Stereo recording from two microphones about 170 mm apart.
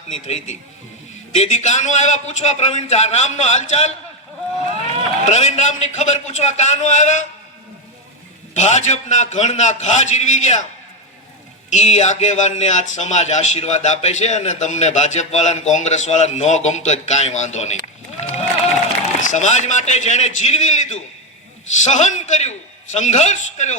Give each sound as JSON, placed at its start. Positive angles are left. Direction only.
{"t": 0.1, "sound": "a man's voice", "side_deg": 40}
{"t": 5.3, "sound": "speech", "side_deg": 45}
{"t": 8.5, "sound": "speech", "side_deg": 45}
{"t": 11.7, "sound": "speech", "side_deg": 40}
{"t": 18.2, "sound": "a sound", "side_deg": 40}
{"t": 19.2, "sound": "speech", "side_deg": 45}